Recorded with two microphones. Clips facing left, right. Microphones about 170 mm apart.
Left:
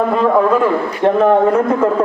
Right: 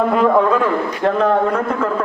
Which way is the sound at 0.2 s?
5° left (ahead or behind).